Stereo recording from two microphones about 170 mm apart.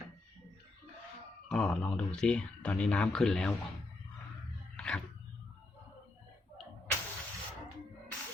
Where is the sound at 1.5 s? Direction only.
5° left (ahead or behind).